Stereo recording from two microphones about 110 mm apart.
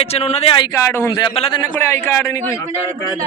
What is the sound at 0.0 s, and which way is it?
Speech, 70° left (ahead or behind).